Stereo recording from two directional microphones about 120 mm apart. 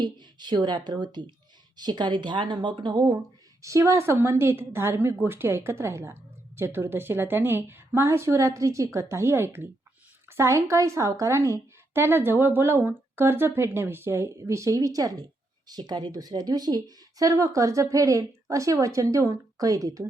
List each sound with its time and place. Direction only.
0.0 s speech: 40° right (ahead or behind)
3.6 s a woman's voice: 25° right (ahead or behind)